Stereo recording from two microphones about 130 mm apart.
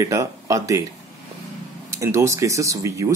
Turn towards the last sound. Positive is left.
turn(degrees=-25)  # may be behind; listen again after turning